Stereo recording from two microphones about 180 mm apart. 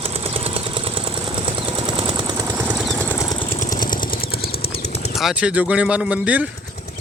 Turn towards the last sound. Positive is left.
turn(degrees=-5)  # may be behind; listen again after turning